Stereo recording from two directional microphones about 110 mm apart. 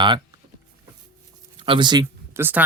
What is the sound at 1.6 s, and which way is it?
Speech, 45° right (ahead or behind).